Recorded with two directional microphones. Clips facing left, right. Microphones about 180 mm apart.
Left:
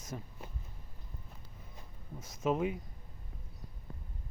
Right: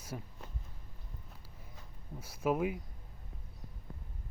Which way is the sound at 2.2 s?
10° right (ahead or behind).